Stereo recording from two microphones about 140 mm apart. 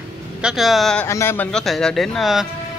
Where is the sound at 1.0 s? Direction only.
20° left (ahead or behind).